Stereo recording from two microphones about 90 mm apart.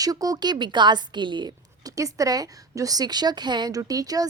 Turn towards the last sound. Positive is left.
turn(degrees=-45)  # may be behind; listen again after turning